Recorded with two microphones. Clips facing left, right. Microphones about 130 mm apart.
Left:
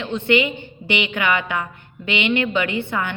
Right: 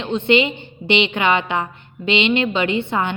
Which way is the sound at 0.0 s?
20° right (ahead or behind).